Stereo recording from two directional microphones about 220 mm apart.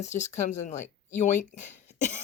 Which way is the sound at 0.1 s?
10° left (ahead or behind).